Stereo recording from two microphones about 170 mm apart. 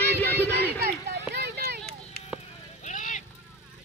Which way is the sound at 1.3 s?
70° right (ahead or behind).